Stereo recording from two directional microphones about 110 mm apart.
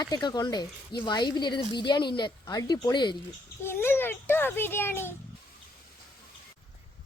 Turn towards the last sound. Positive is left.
turn(degrees=20)  # may be behind; listen again after turning